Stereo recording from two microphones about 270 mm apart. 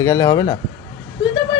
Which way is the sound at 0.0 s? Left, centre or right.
Centre.